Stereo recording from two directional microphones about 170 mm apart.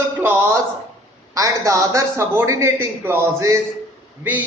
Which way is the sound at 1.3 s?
20° right (ahead or behind).